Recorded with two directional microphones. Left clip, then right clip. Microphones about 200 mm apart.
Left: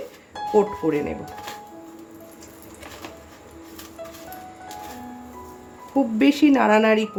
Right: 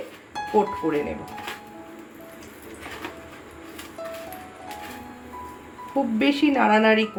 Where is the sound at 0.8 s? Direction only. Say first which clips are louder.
Left 2 dB; 35° left (ahead or behind).